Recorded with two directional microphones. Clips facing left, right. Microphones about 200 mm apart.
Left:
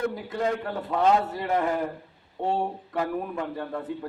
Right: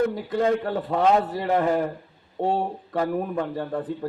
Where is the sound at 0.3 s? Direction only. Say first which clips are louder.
Right 5 dB; 30° right (ahead or behind).